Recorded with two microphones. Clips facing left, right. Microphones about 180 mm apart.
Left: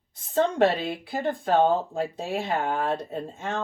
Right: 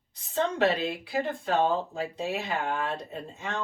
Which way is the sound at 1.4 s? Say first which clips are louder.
Left 5 dB; 45° left (ahead or behind).